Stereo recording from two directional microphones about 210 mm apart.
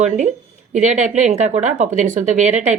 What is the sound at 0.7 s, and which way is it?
Speech, 35° right (ahead or behind).